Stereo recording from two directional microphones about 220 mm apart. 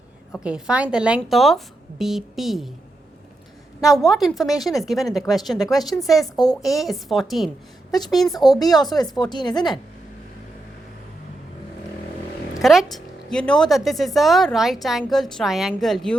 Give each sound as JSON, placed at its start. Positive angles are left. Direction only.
{"t": 0.3, "sound": "a woman's voice", "side_deg": -5}
{"t": 3.8, "sound": "a woman's voice", "side_deg": 0}
{"t": 8.7, "sound": "a woman's voice", "side_deg": 0}
{"t": 9.1, "sound": "speech", "side_deg": 20}
{"t": 9.6, "sound": "a woman's voice", "side_deg": 0}
{"t": 12.6, "sound": "a woman's voice", "side_deg": 0}